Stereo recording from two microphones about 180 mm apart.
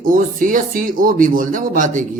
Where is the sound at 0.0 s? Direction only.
50° right (ahead or behind).